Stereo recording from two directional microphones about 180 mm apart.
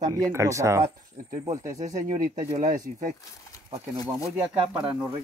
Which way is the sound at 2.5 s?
50° right (ahead or behind).